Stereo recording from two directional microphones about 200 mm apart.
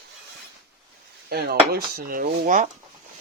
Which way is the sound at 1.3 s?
50° right (ahead or behind).